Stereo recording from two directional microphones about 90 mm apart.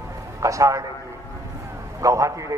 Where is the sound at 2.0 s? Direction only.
35° right (ahead or behind).